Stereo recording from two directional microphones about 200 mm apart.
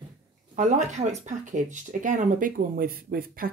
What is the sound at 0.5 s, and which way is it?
Speech, 35° right (ahead or behind).